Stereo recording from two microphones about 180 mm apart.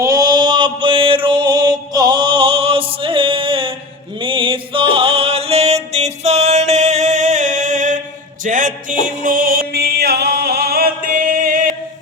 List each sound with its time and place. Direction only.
0.0 s mantra: 20° right (ahead or behind)
4.2 s music: 30° right (ahead or behind); by 11.7 s 50° right (ahead or behind)